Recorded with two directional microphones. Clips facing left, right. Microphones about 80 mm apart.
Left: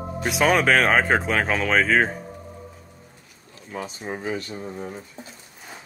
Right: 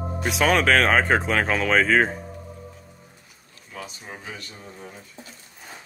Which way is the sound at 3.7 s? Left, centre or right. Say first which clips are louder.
Left 6 dB; left.